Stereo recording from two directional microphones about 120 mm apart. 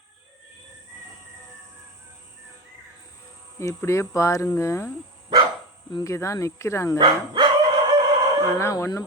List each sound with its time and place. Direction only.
3.6 s speech: 25° left (ahead or behind)
5.9 s speech: 30° left (ahead or behind)
7.0 s bow-wow: 40° right (ahead or behind)
8.5 s speech: 25° left (ahead or behind)